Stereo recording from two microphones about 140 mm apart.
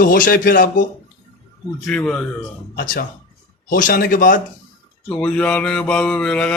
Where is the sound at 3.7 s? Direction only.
85° left.